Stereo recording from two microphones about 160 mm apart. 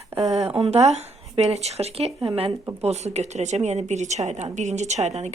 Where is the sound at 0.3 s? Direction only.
40° right (ahead or behind).